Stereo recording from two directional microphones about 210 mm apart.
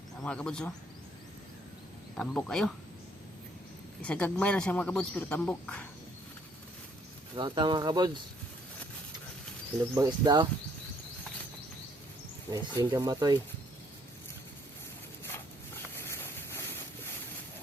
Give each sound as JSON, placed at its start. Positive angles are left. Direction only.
{"t": 0.2, "sound": "a man's voice", "side_deg": 5}
{"t": 2.1, "sound": "a man's voice", "side_deg": 0}
{"t": 4.0, "sound": "a man's voice", "side_deg": 5}
{"t": 7.3, "sound": "speech", "side_deg": -20}
{"t": 9.9, "sound": "speech", "side_deg": -15}
{"t": 12.5, "sound": "speech", "side_deg": -15}
{"t": 16.0, "sound": "a sound", "side_deg": 10}